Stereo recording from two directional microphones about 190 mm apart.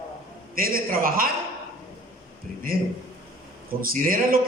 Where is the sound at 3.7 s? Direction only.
50° right (ahead or behind).